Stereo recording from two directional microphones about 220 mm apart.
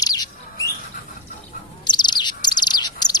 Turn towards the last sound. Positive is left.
turn(degrees=20)  # may be behind; listen again after turning